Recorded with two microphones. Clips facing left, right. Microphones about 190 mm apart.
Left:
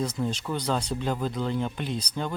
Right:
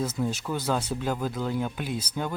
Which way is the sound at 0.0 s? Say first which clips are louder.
Even; 5° right (ahead or behind).